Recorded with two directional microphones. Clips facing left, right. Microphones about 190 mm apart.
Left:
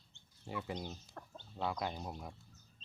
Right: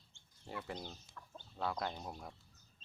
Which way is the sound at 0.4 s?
10° left (ahead or behind).